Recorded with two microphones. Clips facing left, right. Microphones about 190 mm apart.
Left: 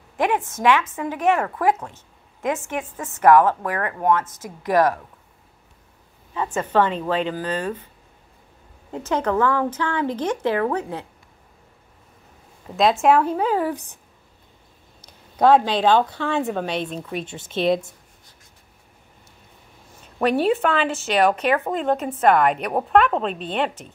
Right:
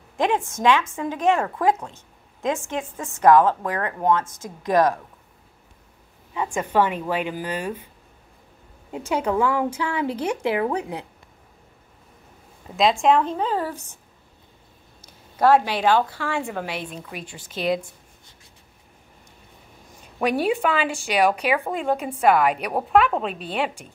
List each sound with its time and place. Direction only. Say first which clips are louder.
1.1 s speech: even; 20° right (ahead or behind)
2.8 s a woman's voice: even; 20° left (ahead or behind)
3.2 s speech: left 1 dB; 20° right (ahead or behind)
4.2 s a woman's voice: left 1 dB; 20° left (ahead or behind)
4.6 s speech: left 1 dB; 20° right (ahead or behind)
6.3 s speech: left 1 dB; 10° right (ahead or behind)
8.9 s speech: left 1 dB; 10° right (ahead or behind)
12.7 s speech: left 1 dB; centre (ahead or behind)
15.3 s speech: left 2 dB; 5° right (ahead or behind)
16.6 s a woman's voice: left 5 dB; 20° left (ahead or behind)
20.2 s speech: left 2 dB; 10° right (ahead or behind)